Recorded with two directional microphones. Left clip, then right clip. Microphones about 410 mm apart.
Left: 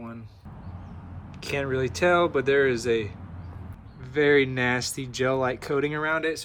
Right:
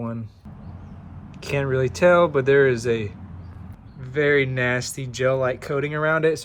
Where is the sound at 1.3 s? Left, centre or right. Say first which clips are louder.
Right 4 dB; centre.